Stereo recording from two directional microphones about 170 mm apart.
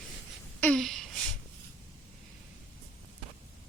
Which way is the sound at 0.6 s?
5° left (ahead or behind).